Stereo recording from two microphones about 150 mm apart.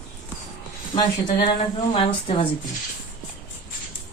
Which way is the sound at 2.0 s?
35° left (ahead or behind).